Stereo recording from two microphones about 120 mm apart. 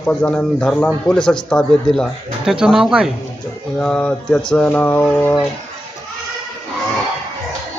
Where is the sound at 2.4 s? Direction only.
5° right (ahead or behind).